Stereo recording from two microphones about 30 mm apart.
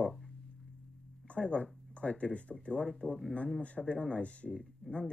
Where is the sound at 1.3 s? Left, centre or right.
Left.